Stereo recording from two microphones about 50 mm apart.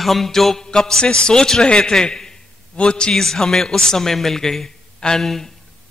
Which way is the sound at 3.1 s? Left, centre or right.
Centre.